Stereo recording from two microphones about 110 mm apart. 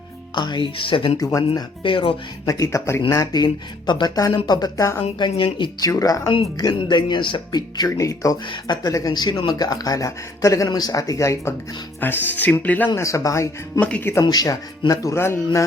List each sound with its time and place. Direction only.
0.3 s speech: 45° left (ahead or behind)
1.2 s speech: 30° left (ahead or behind)
1.5 s speech: 50° left (ahead or behind)
2.5 s speech: 30° left (ahead or behind); by 5.9 s 45° left (ahead or behind)
5.9 s speech: 30° left (ahead or behind)
6.6 s speech: 45° left (ahead or behind)
8.4 s speech: 40° left (ahead or behind); by 12.9 s 15° left (ahead or behind)
12.9 s speech: 25° left (ahead or behind)
13.7 s speech: 15° left (ahead or behind)
14.1 s speech: 35° left (ahead or behind)